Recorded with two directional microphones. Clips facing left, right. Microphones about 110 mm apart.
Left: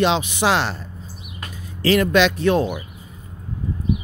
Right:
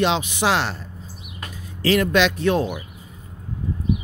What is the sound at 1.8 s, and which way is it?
Speech, 45° left (ahead or behind).